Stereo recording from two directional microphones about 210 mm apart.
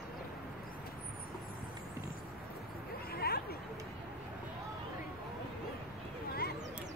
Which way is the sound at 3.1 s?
45° left (ahead or behind).